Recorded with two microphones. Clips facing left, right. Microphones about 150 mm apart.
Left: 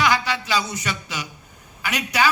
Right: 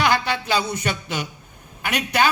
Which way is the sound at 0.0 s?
55° right (ahead or behind).